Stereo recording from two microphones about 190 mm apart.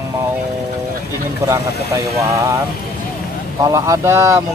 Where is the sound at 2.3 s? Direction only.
15° right (ahead or behind).